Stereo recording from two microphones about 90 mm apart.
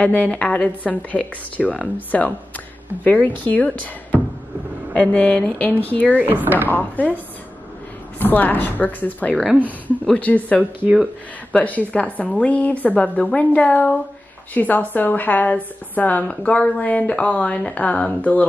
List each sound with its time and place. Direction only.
0.0 s speech: 15° left (ahead or behind)
6.0 s speech: 15° right (ahead or behind)
6.7 s a woman's voice: 20° left (ahead or behind)
8.2 s a woman's voice: 20° left (ahead or behind)
10.6 s speech: 15° right (ahead or behind)
11.5 s a woman's voice: 15° left (ahead or behind)